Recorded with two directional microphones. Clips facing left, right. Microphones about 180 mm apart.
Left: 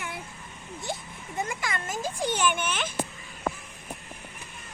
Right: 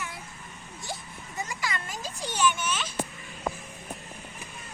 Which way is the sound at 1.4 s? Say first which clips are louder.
Left 2 dB; 50° left (ahead or behind).